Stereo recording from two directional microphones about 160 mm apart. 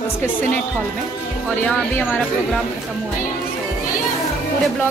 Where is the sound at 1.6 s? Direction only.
15° left (ahead or behind).